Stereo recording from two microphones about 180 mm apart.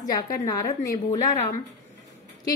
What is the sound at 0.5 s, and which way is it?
Speech, 20° left (ahead or behind).